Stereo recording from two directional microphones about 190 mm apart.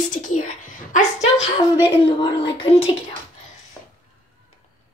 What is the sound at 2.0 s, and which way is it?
Speech, 25° left (ahead or behind).